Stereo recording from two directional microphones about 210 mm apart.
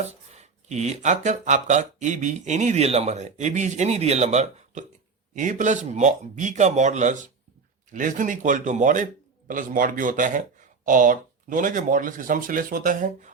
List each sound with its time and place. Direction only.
0.0 s speech: 30° right (ahead or behind)